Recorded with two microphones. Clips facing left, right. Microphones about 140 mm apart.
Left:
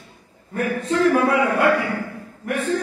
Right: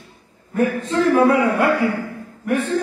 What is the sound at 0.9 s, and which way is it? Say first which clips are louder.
Speech: right 1 dB; 30° right (ahead or behind).